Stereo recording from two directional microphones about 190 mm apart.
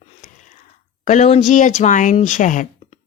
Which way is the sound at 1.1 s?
35° left (ahead or behind).